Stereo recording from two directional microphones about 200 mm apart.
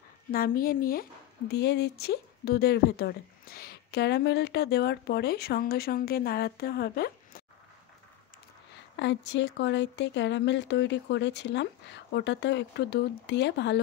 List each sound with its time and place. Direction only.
0.3 s speech: 45° left (ahead or behind)
8.9 s speech: 60° left (ahead or behind)